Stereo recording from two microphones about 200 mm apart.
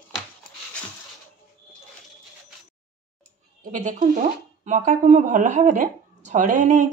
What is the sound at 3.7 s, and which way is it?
Speech, 40° right (ahead or behind).